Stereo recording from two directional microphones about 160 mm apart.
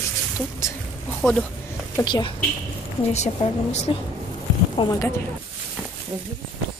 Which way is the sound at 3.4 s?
40° left (ahead or behind).